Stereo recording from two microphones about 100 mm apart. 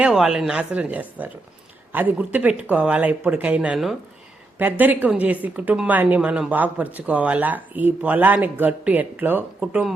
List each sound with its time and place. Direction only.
0.0 s a woman's voice: 5° right (ahead or behind)
4.5 s a woman's voice: 20° right (ahead or behind)